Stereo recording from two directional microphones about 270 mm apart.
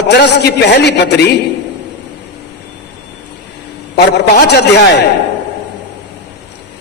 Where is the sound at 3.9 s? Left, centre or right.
Left.